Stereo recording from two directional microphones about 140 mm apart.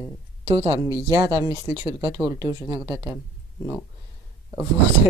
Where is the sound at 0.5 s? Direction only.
50° right (ahead or behind).